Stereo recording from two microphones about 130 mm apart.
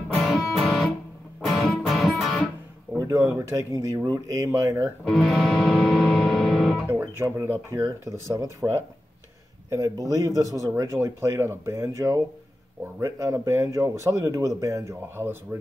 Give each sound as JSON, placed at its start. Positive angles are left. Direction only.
{"t": 0.2, "sound": "music", "side_deg": 0}
{"t": 3.0, "sound": "speech", "side_deg": -25}
{"t": 5.0, "sound": "music", "side_deg": 0}
{"t": 6.9, "sound": "speech", "side_deg": -20}
{"t": 9.7, "sound": "speech", "side_deg": -30}